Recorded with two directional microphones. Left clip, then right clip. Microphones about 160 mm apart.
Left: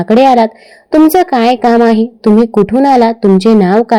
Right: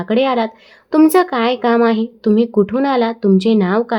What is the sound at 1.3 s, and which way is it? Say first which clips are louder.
A woman's voice: left 7 dB; 25° left (ahead or behind).